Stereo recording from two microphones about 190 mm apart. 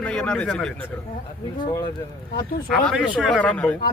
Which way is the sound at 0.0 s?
5° left (ahead or behind).